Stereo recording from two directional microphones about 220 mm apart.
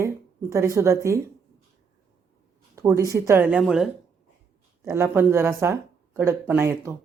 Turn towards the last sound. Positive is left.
turn(degrees=-10)  # may be behind; listen again after turning